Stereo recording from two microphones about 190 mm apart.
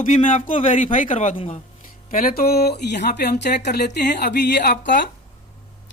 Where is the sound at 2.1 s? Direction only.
50° left (ahead or behind).